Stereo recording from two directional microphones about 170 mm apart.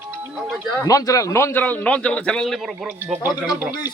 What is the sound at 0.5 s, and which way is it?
Speech, centre (ahead or behind).